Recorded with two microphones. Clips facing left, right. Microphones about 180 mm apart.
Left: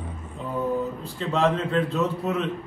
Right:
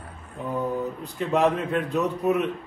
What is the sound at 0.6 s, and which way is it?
A man's voice, 15° right (ahead or behind).